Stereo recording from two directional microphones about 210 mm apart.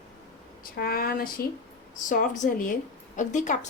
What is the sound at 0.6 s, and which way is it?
A woman's voice, 45° left (ahead or behind).